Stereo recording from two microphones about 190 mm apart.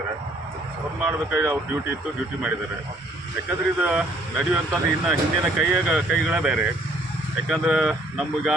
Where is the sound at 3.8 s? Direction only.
5° right (ahead or behind).